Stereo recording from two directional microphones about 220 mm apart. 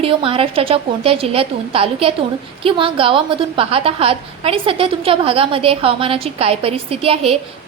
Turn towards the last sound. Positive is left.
turn(degrees=-25)  # may be behind; listen again after turning